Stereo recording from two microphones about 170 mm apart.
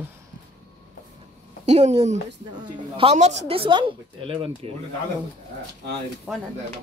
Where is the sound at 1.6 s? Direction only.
40° right (ahead or behind).